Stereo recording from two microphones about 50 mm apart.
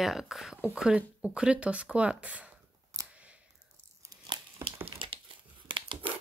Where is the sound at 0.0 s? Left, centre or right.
Centre.